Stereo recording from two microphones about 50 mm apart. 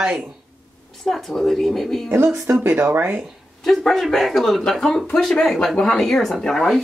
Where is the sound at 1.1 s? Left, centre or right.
Centre.